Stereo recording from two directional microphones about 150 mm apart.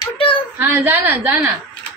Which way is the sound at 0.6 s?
15° right (ahead or behind).